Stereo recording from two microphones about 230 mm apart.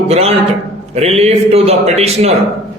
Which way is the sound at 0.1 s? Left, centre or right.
Right.